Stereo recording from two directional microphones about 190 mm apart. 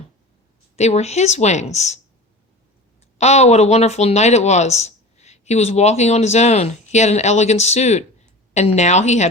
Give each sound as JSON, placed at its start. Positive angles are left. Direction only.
{"t": 0.8, "sound": "speech", "side_deg": 35}
{"t": 3.2, "sound": "speech", "side_deg": 35}